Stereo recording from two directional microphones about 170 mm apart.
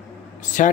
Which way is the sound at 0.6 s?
50° left (ahead or behind).